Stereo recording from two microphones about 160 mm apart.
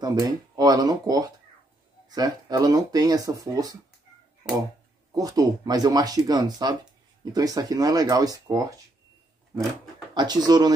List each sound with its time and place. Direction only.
0.0 s speech: 25° right (ahead or behind)
5.1 s speech: 25° right (ahead or behind)
10.1 s speech: 25° right (ahead or behind)